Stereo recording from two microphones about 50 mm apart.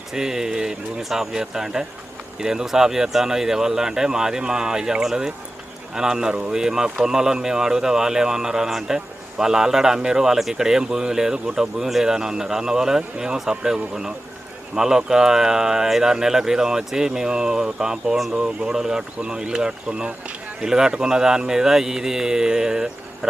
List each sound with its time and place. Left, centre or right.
0.1 s speech: centre